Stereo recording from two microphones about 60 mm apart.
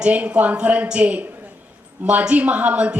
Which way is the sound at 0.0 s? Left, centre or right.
Centre.